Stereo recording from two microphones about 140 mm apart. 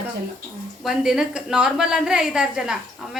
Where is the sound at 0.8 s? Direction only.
5° right (ahead or behind).